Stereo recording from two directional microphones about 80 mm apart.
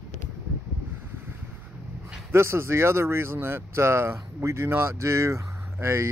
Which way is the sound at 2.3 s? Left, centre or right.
Right.